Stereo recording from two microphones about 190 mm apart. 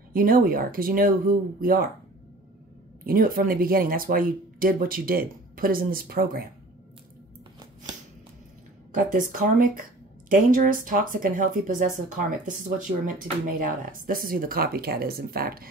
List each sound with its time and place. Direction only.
0.1 s speech: 50° right (ahead or behind)
3.1 s speech: 50° right (ahead or behind)
8.9 s speech: 45° right (ahead or behind)